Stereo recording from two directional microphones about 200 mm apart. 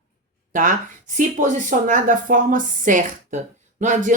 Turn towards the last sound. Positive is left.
turn(degrees=-40)  # may be behind; listen again after turning